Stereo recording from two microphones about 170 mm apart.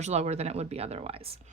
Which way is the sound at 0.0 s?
40° right (ahead or behind).